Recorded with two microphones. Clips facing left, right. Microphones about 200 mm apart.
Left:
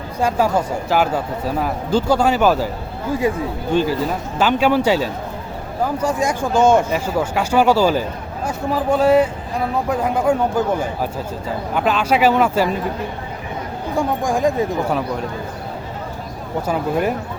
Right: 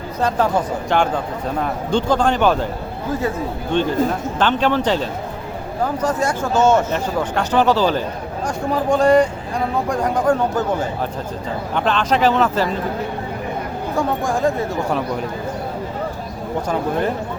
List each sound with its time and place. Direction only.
0.2 s a man's voice: 10° left (ahead or behind)
11.7 s speech: 5° left (ahead or behind)
13.9 s speech: 15° left (ahead or behind)